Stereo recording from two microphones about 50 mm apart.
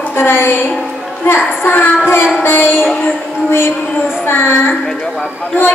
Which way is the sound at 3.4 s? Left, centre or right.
Left.